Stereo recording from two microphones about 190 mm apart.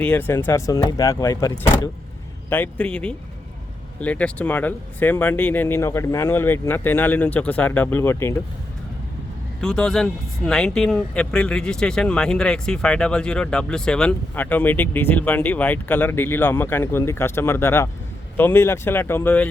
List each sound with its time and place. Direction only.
0.0 s speech: 10° left (ahead or behind)
9.6 s speech: 5° left (ahead or behind)